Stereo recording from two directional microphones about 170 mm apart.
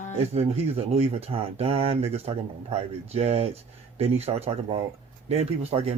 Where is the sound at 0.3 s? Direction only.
40° right (ahead or behind).